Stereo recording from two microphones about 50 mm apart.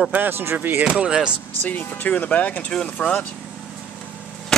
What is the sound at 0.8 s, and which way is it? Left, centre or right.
Speech, centre.